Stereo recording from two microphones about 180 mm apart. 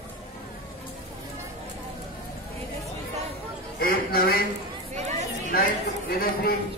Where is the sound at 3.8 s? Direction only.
55° left (ahead or behind).